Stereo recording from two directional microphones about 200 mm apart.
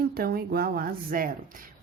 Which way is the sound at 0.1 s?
50° right (ahead or behind).